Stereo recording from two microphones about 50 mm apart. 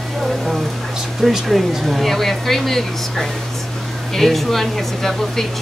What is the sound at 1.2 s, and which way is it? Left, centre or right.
Speech, centre.